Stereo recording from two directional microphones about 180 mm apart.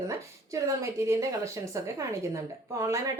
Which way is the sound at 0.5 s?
15° right (ahead or behind).